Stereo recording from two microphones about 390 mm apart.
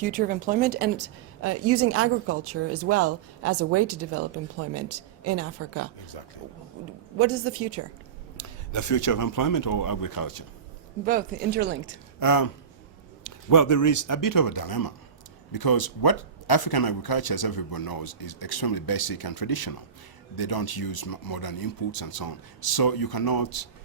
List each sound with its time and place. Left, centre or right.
0.0 s speech: right
7.2 s speech: right
8.4 s speech: left
11.0 s speech: right
12.2 s speech: left